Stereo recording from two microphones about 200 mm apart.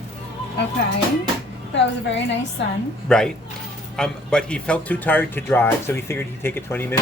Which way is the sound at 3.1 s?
5° left (ahead or behind).